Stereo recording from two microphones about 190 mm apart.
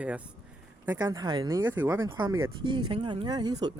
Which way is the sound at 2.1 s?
20° right (ahead or behind).